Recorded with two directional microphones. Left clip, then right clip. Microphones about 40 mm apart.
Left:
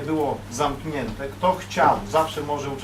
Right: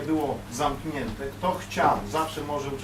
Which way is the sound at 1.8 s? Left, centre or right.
Left.